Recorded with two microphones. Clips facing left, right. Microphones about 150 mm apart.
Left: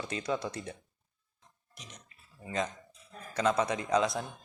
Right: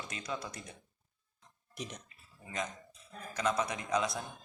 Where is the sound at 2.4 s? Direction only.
30° left (ahead or behind).